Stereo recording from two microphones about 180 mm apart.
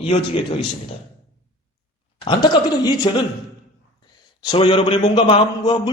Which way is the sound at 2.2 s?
25° left (ahead or behind).